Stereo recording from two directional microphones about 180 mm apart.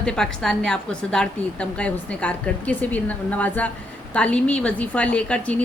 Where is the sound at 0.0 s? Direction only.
5° left (ahead or behind).